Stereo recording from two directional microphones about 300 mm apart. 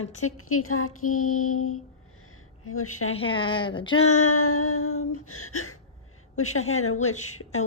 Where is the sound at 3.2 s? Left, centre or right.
Centre.